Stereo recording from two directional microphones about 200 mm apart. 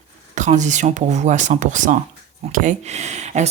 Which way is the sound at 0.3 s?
35° right (ahead or behind).